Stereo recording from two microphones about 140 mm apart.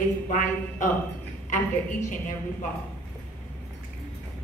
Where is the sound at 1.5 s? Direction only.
65° left (ahead or behind).